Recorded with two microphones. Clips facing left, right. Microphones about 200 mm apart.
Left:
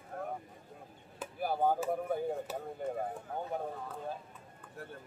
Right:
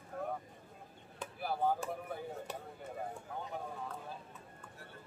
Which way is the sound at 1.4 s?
50° left (ahead or behind).